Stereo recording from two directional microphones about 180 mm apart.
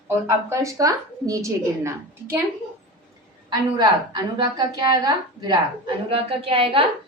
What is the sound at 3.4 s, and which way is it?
A woman's voice, 20° right (ahead or behind).